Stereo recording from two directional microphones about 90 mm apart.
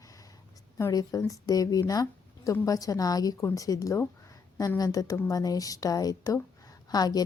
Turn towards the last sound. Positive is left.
turn(degrees=45)  # may be behind; listen again after turning